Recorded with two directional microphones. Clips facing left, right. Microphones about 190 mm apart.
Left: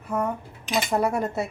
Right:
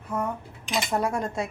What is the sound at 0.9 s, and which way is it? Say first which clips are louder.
Speech: left 3 dB; 5° left (ahead or behind).